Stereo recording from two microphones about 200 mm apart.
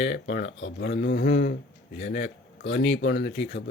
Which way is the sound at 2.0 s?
60° left (ahead or behind).